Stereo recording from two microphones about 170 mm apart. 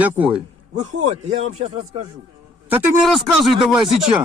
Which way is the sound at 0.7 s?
45° right (ahead or behind).